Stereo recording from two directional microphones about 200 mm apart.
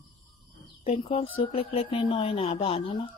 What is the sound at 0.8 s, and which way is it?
Speech, 30° left (ahead or behind).